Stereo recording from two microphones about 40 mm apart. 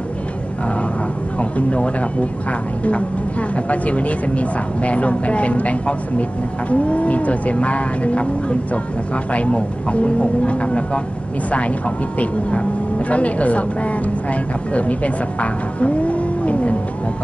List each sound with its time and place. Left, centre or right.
1.4 s a woman's voice: left
12.2 s a woman's voice: left